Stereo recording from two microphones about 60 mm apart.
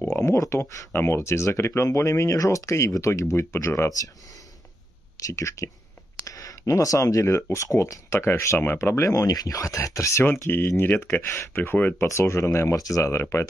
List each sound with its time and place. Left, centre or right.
0.1 s speech: left
0.9 s speech: left
5.1 s speech: left
6.2 s speech: left
10.2 s speech: left
12.1 s speech: left